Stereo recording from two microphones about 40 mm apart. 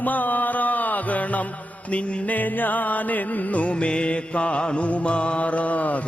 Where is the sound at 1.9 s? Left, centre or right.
Left.